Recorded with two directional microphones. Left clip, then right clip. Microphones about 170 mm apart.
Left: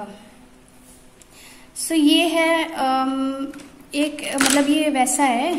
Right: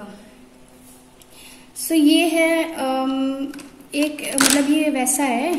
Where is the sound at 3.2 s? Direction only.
90° left.